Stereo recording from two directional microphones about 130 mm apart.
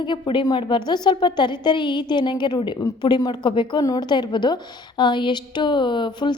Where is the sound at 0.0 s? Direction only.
40° left (ahead or behind).